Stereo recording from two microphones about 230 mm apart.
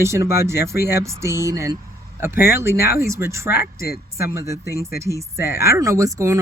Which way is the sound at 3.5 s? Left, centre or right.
Left.